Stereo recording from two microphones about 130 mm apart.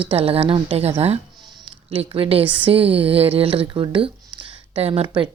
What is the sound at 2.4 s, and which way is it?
Speech, 10° right (ahead or behind).